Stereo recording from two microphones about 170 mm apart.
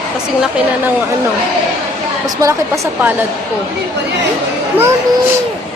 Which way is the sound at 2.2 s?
20° right (ahead or behind).